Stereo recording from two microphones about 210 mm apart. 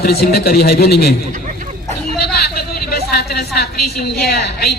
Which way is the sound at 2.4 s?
45° left (ahead or behind).